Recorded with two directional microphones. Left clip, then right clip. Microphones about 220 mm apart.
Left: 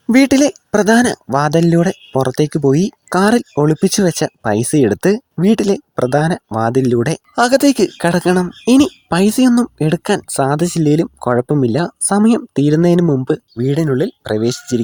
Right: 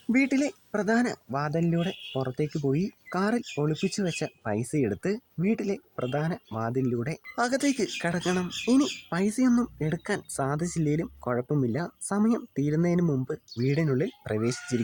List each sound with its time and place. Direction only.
0.1 s speech: 40° left (ahead or behind)